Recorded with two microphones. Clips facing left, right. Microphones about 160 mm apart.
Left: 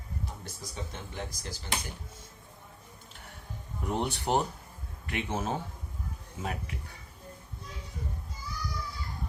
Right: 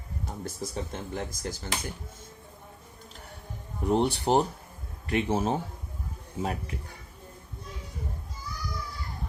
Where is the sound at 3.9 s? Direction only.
30° right (ahead or behind).